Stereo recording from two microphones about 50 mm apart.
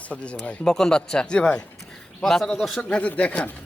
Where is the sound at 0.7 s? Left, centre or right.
Centre.